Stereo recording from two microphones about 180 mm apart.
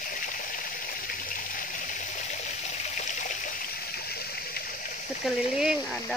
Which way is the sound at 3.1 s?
45° left (ahead or behind).